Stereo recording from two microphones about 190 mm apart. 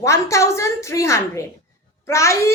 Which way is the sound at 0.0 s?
15° left (ahead or behind).